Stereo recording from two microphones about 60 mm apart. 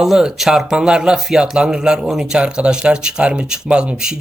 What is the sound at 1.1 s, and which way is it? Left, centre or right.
Speech, centre.